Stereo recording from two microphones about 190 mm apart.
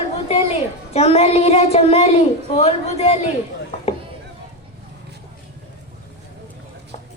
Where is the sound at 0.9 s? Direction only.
35° left (ahead or behind).